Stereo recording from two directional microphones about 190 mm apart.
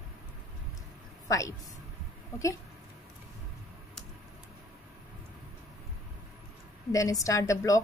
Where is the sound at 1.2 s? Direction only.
15° left (ahead or behind).